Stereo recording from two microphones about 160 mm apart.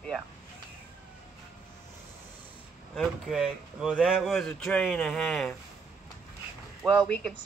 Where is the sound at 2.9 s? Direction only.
Centre (ahead or behind).